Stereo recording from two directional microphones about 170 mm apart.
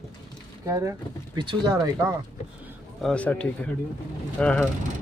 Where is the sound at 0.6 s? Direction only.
15° right (ahead or behind).